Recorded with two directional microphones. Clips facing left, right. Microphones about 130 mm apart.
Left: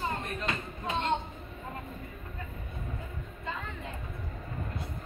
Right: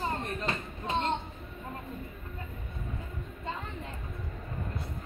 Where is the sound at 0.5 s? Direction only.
35° right (ahead or behind).